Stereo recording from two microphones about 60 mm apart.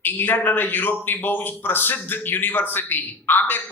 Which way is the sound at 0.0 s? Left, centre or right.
Left.